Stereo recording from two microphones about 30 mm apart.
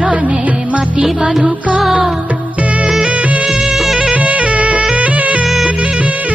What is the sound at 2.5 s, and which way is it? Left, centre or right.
Music, right.